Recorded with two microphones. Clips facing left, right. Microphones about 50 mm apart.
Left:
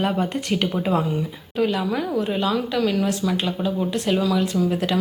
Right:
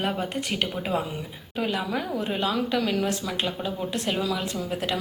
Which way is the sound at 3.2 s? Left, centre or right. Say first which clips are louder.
Left 6 dB; centre.